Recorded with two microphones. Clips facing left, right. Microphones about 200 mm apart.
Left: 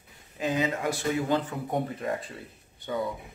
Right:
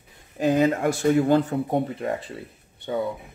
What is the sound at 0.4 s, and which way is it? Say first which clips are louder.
Speech: right 8 dB; 45° right (ahead or behind).